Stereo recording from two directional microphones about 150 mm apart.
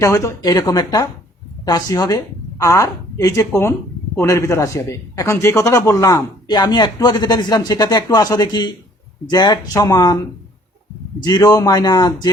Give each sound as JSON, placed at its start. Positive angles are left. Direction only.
{"t": 0.0, "sound": "a woman's voice", "side_deg": 20}
{"t": 11.3, "sound": "a woman's voice", "side_deg": 25}